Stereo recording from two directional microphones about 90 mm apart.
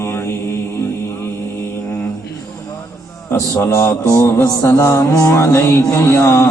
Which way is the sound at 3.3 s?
30° left (ahead or behind).